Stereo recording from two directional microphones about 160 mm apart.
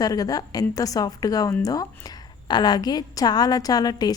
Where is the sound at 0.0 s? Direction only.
25° left (ahead or behind).